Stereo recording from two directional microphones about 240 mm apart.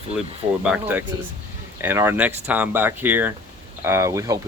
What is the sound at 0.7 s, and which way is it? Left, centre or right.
Speech, centre.